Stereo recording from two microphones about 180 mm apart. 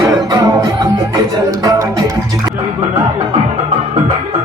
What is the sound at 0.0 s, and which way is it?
Music, 20° right (ahead or behind).